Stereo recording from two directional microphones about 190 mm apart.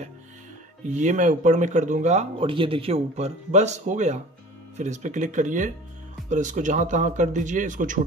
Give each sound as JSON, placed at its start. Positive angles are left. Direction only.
{"t": 0.8, "sound": "speech", "side_deg": -40}